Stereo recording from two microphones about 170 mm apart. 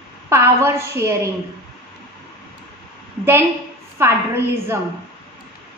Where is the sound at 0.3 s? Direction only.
15° right (ahead or behind).